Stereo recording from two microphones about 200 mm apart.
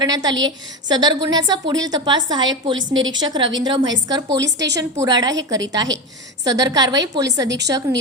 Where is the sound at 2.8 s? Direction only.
70° right (ahead or behind).